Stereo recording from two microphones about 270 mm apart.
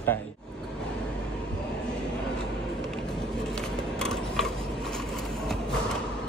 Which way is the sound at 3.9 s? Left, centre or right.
Centre.